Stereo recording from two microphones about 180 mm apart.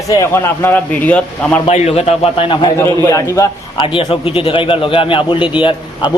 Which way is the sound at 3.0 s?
15° left (ahead or behind).